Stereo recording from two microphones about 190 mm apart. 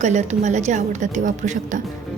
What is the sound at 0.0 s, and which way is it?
A woman's voice, 40° right (ahead or behind).